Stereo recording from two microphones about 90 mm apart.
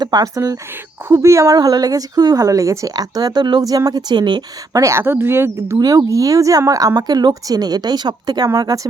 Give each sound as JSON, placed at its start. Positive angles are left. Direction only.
{"t": 0.0, "sound": "a woman's voice", "side_deg": -45}
{"t": 1.0, "sound": "a woman's voice", "side_deg": -30}
{"t": 3.6, "sound": "a woman's voice", "side_deg": -40}
{"t": 4.7, "sound": "speech", "side_deg": -35}
{"t": 5.8, "sound": "a woman's voice", "side_deg": -40}